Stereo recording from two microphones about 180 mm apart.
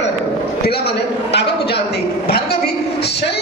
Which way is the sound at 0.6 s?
60° left (ahead or behind).